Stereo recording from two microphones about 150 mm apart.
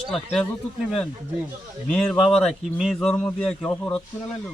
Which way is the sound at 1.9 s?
5° left (ahead or behind).